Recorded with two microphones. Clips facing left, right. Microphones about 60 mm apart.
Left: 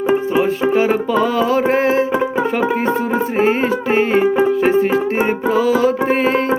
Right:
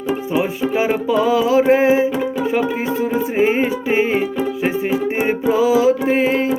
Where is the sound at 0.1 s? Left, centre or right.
Left.